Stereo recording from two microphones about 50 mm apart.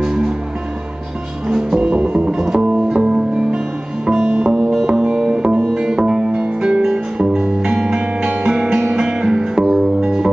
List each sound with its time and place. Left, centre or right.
0.0 s music: centre
1.5 s music: centre